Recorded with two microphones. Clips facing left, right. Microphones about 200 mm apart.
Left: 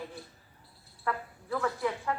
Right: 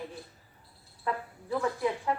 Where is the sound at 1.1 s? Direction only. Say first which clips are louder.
Right 1 dB; 20° right (ahead or behind).